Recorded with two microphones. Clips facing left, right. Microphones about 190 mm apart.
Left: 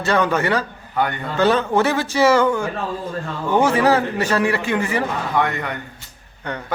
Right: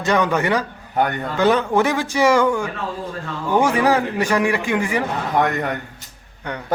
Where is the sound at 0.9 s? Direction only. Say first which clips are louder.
Right 2 dB; 45° right (ahead or behind).